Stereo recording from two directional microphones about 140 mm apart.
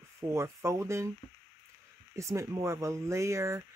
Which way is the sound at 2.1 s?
20° right (ahead or behind).